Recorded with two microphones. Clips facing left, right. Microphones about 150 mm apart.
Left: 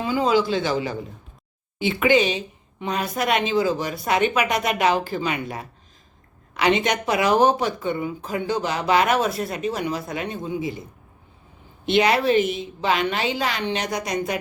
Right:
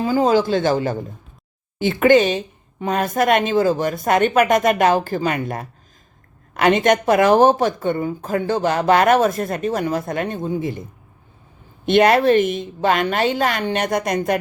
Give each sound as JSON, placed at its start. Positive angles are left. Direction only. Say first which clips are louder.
{"t": 0.0, "sound": "speech", "louder": "right 4 dB", "side_deg": -45}
{"t": 11.9, "sound": "speech", "louder": "right 5 dB", "side_deg": -50}